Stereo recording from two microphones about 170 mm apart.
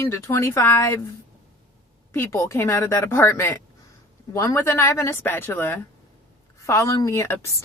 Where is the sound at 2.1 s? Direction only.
15° left (ahead or behind).